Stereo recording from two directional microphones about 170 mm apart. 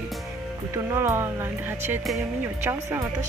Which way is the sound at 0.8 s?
15° right (ahead or behind).